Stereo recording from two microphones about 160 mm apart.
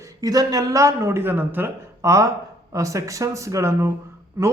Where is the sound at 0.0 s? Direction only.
25° right (ahead or behind).